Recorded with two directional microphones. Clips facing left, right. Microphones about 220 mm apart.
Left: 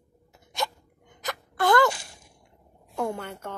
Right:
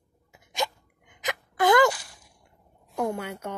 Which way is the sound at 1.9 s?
25° left (ahead or behind).